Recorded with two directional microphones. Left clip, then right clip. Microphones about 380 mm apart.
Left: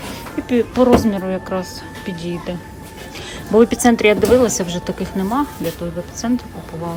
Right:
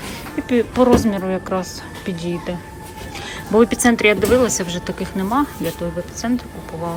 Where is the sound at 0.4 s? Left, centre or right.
Centre.